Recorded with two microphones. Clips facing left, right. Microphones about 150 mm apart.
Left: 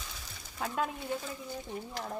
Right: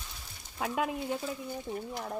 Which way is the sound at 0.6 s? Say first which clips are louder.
Right 2 dB; 15° right (ahead or behind).